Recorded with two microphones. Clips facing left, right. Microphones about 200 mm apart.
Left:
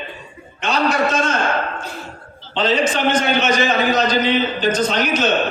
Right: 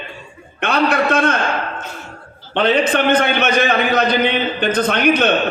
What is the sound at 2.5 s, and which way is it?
A man's voice, 60° right (ahead or behind).